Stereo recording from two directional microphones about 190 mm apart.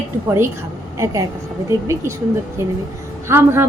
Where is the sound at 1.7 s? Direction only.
15° right (ahead or behind).